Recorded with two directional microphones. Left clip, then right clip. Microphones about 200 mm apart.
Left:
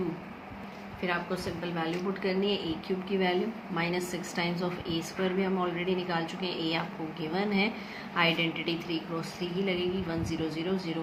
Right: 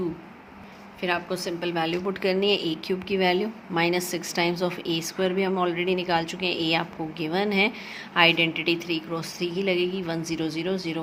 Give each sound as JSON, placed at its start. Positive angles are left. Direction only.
{"t": 1.0, "sound": "a woman's voice", "side_deg": -50}